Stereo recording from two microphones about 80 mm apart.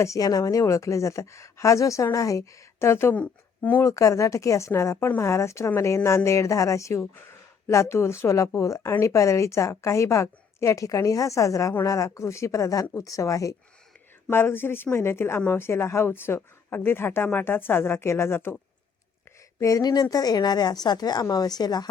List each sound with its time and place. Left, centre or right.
0.0 s speech: left
3.8 s speech: left
14.3 s speech: left
19.5 s a woman's voice: left